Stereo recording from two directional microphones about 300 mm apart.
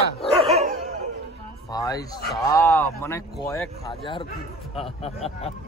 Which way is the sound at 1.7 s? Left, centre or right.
Centre.